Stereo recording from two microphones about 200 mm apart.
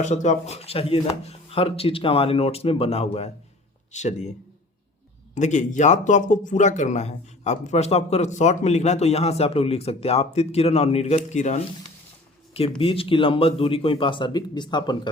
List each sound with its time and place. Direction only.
0.0 s speech: 35° left (ahead or behind)
12.8 s speech: 25° left (ahead or behind)